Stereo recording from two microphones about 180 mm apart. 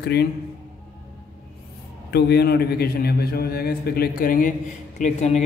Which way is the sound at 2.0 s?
65° left (ahead or behind).